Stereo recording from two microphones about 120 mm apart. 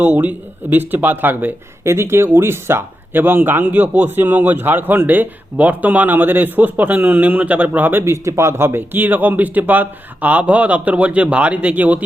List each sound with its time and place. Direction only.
0.0 s speech: 15° right (ahead or behind)